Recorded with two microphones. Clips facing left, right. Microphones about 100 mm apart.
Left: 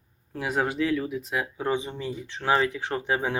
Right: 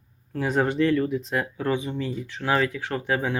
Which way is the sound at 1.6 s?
20° left (ahead or behind).